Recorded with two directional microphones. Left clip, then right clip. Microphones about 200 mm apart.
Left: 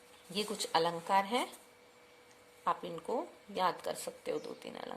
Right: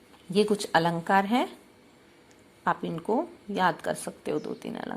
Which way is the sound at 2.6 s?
5° right (ahead or behind).